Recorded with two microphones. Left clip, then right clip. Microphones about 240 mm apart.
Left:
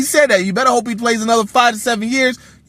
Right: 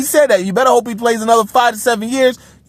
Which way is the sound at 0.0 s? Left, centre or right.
Right.